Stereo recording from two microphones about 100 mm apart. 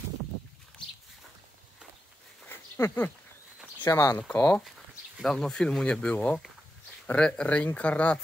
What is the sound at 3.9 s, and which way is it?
Speech, 30° left (ahead or behind).